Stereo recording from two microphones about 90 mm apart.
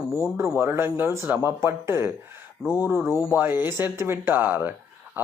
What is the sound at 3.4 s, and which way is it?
Speech, 20° right (ahead or behind).